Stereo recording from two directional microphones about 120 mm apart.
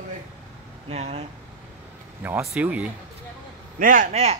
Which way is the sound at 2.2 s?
10° right (ahead or behind).